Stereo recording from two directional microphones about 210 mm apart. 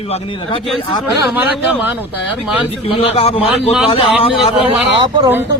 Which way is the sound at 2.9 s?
25° left (ahead or behind).